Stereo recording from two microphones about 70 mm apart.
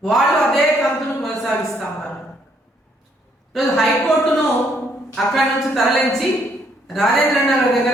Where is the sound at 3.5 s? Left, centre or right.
Centre.